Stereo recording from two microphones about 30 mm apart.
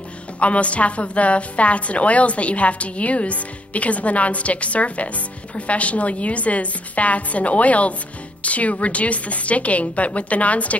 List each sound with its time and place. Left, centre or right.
0.4 s a woman's voice: left